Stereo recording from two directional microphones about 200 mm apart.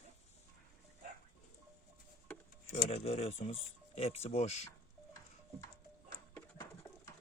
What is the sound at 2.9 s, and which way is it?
Speech, 30° left (ahead or behind).